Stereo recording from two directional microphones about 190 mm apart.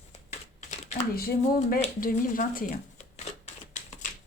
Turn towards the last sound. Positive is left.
turn(degrees=40)  # may be behind; listen again after turning